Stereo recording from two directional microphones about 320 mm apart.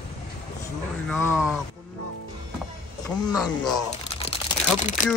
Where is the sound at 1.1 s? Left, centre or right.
Centre.